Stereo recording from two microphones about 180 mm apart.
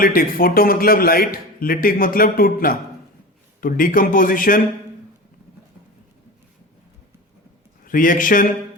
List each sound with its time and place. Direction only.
0.0 s a man's voice: 55° left (ahead or behind)
7.9 s a man's voice: 50° left (ahead or behind)